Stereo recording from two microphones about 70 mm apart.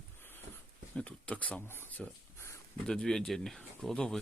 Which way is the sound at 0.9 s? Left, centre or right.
Centre.